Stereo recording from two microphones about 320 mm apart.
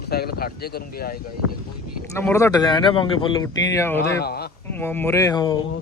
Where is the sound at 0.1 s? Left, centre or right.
Left.